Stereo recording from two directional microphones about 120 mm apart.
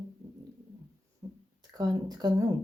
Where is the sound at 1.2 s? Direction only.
25° right (ahead or behind).